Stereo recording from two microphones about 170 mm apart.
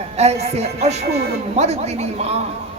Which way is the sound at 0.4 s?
40° right (ahead or behind).